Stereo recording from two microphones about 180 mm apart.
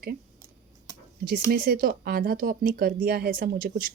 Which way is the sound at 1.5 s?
55° right (ahead or behind).